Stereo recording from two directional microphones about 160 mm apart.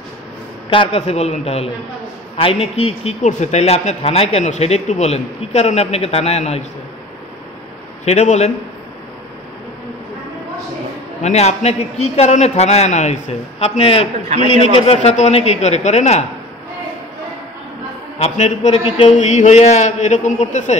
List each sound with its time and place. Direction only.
0.7 s a man's voice: 35° left (ahead or behind)
8.0 s a man's voice: 45° left (ahead or behind)
11.2 s a man's voice: 45° left (ahead or behind)
18.2 s a man's voice: 45° left (ahead or behind)